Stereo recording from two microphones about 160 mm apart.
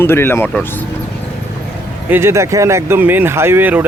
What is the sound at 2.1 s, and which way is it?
Speech, 15° right (ahead or behind).